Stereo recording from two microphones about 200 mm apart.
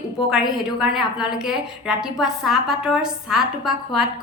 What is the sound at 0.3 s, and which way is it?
A woman's voice, centre (ahead or behind).